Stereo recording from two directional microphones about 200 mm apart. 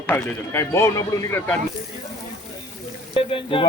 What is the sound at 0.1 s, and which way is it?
A man's voice, 10° left (ahead or behind).